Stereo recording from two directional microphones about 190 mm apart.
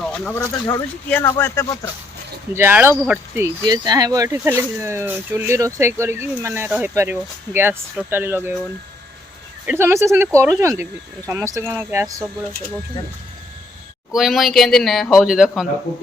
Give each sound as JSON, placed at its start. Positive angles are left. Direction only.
{"t": 0.0, "sound": "speech", "side_deg": 5}
{"t": 2.5, "sound": "speech", "side_deg": -10}
{"t": 9.6, "sound": "speech", "side_deg": -10}
{"t": 14.1, "sound": "speech", "side_deg": 0}